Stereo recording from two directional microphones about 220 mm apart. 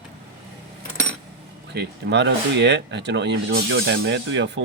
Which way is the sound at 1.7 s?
50° right (ahead or behind).